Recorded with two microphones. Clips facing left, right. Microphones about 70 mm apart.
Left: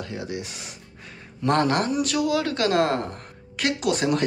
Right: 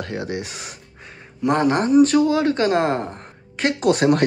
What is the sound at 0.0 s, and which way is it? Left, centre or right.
Speech, right.